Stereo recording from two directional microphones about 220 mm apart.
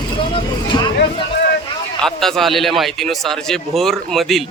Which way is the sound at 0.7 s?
20° left (ahead or behind).